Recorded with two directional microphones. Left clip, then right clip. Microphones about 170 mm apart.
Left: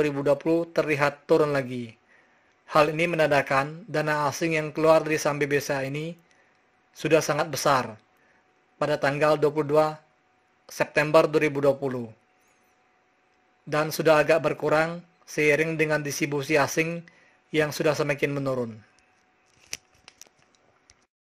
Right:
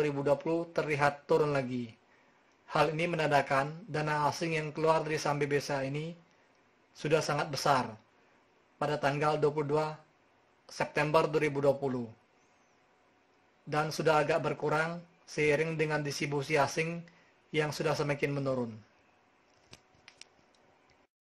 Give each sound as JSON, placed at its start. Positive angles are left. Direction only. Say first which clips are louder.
{"t": 0.0, "sound": "speech", "louder": "left 6 dB", "side_deg": 30}
{"t": 13.7, "sound": "speech", "louder": "left 8 dB", "side_deg": 30}